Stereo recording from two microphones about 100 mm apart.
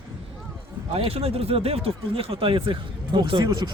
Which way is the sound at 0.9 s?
75° right (ahead or behind).